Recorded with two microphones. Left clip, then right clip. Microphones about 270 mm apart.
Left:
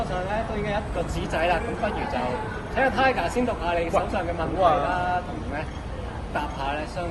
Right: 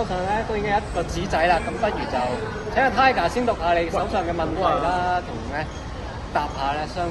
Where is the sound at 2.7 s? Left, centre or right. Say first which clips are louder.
Right 4 dB; right.